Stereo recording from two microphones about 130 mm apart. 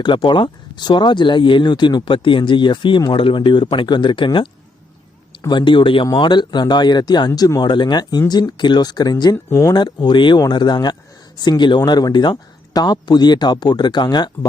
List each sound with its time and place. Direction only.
0.0 s speech: 40° left (ahead or behind)
5.5 s speech: 35° left (ahead or behind)